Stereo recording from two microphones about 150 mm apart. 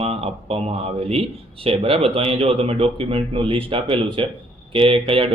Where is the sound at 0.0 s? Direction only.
40° right (ahead or behind).